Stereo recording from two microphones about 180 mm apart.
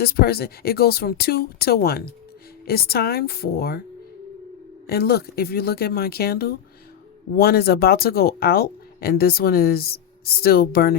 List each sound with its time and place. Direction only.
0.0 s speech: 60° left (ahead or behind)
4.9 s speech: 60° left (ahead or behind)